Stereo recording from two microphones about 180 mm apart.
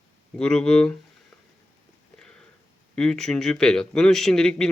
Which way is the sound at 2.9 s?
5° left (ahead or behind).